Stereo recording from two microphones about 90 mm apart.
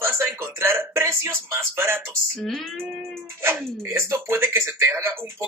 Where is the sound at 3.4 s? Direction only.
30° right (ahead or behind).